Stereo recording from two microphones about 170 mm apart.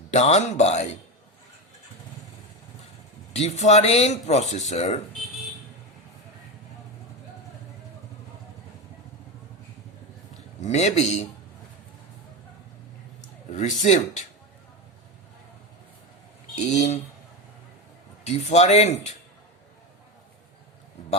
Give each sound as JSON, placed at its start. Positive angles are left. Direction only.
{"t": 0.1, "sound": "speech", "side_deg": 40}
{"t": 3.3, "sound": "speech", "side_deg": 40}
{"t": 10.6, "sound": "speech", "side_deg": 40}
{"t": 13.5, "sound": "speech", "side_deg": 45}
{"t": 16.6, "sound": "speech", "side_deg": 45}
{"t": 18.3, "sound": "speech", "side_deg": 45}